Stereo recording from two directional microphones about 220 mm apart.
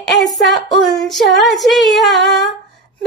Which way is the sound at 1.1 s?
Centre (ahead or behind).